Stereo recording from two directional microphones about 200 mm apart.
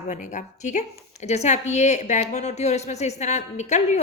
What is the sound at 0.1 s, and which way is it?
A woman's voice, 35° left (ahead or behind).